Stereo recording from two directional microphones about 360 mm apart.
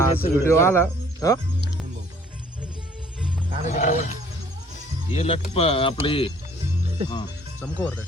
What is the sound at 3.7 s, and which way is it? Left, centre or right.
Speech, centre.